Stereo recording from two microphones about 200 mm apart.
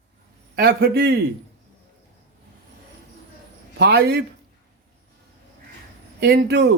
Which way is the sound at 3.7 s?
55° right (ahead or behind).